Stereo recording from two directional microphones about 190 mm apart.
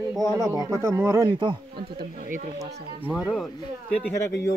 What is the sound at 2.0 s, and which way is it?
Speech, 45° right (ahead or behind).